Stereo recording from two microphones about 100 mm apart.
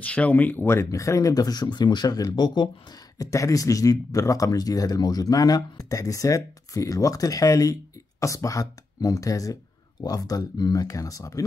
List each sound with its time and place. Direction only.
0.0 s speech: 15° left (ahead or behind); by 2.7 s 45° left (ahead or behind)
3.2 s speech: 30° left (ahead or behind)